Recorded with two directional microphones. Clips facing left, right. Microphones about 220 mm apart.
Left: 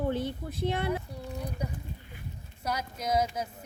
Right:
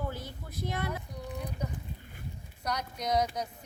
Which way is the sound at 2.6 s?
5° left (ahead or behind).